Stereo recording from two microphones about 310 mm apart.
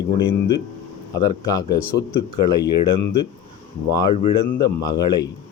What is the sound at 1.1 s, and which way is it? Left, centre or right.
Speech, centre.